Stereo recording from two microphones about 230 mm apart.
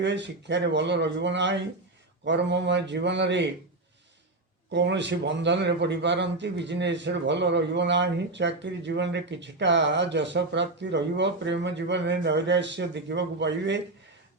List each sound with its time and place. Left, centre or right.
0.0 s a man's voice: right
4.7 s a man's voice: right